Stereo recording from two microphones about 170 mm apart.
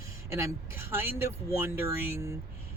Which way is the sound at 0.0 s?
15° right (ahead or behind).